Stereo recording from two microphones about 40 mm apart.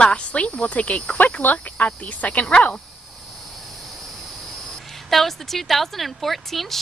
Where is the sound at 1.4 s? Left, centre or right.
Left.